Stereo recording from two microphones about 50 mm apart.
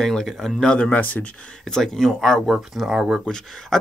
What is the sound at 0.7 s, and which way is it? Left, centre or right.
Speech, left.